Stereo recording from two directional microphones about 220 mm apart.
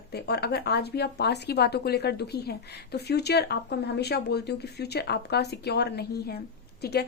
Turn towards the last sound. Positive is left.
turn(degrees=45)  # may be behind; listen again after turning